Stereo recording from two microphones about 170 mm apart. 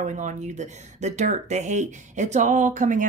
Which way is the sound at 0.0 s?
45° right (ahead or behind).